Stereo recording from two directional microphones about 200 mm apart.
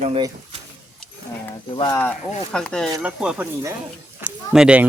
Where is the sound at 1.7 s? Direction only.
25° left (ahead or behind).